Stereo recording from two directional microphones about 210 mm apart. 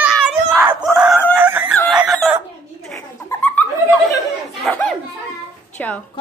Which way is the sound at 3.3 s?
5° left (ahead or behind).